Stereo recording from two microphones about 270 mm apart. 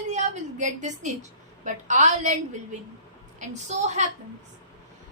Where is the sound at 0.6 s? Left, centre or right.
Right.